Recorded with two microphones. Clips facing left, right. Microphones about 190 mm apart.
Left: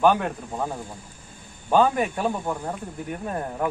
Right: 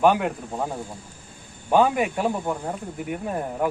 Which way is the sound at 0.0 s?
10° right (ahead or behind).